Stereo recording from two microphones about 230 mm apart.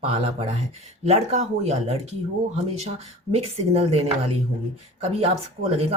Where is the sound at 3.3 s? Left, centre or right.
Right.